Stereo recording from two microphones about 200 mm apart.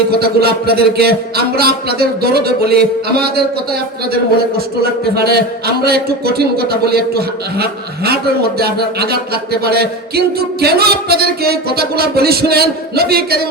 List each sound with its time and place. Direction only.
0.2 s a man's voice: 50° right (ahead or behind)